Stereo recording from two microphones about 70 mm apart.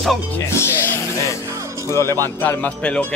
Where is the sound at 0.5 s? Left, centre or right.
Left.